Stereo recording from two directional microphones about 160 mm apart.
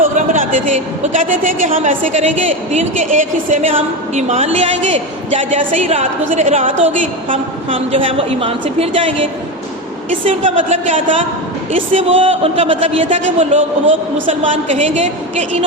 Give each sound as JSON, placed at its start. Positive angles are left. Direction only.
{"t": 0.0, "sound": "a sound", "side_deg": -55}
{"t": 1.0, "sound": "a woman's voice", "side_deg": -50}
{"t": 3.7, "sound": "a woman's voice", "side_deg": -40}
{"t": 10.2, "sound": "a woman's voice", "side_deg": -45}
{"t": 11.9, "sound": "a woman's voice", "side_deg": -35}